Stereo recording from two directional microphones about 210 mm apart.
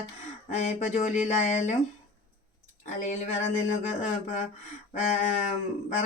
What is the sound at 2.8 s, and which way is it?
Speech, 35° left (ahead or behind).